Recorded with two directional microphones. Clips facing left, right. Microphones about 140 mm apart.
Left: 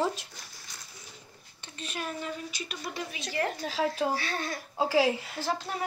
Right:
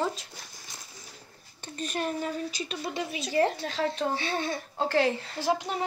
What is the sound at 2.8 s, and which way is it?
Speech, 25° right (ahead or behind).